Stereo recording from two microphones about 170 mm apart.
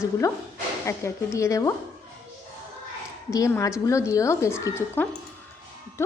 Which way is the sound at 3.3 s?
20° left (ahead or behind).